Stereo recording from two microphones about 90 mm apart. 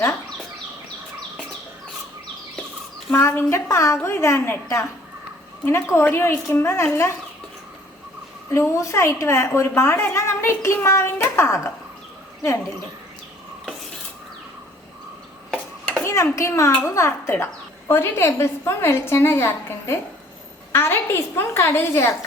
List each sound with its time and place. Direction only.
3.2 s a woman's voice: 30° left (ahead or behind)
8.5 s a woman's voice: 35° left (ahead or behind)
15.4 s a sound: 10° left (ahead or behind)
16.0 s a woman's voice: 35° left (ahead or behind)